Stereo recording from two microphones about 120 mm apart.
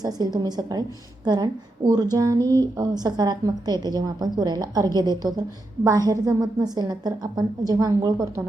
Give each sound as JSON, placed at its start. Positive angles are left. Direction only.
{"t": 0.0, "sound": "a woman's voice", "side_deg": -35}